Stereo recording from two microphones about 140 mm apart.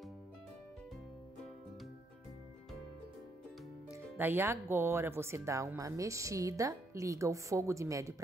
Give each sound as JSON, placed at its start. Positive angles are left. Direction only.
{"t": 3.9, "sound": "speech", "side_deg": -15}